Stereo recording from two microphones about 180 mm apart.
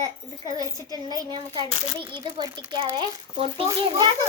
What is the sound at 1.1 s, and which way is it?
A child's voice, 20° right (ahead or behind).